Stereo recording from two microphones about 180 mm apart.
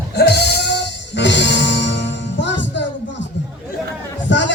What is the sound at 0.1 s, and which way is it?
Music, 65° left (ahead or behind).